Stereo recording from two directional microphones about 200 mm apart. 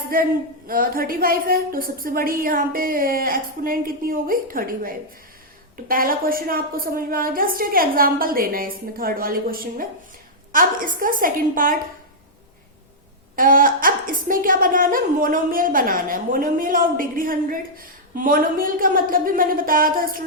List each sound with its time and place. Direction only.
0.1 s a woman's voice: 45° right (ahead or behind)
13.3 s a woman's voice: 45° right (ahead or behind)